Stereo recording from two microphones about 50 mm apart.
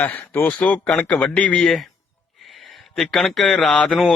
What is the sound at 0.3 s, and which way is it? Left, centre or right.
Speech, left.